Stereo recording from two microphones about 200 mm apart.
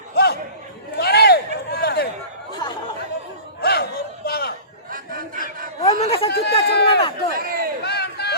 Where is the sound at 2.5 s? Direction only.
20° left (ahead or behind).